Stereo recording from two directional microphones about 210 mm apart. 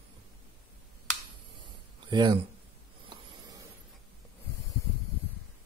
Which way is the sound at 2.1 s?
20° right (ahead or behind).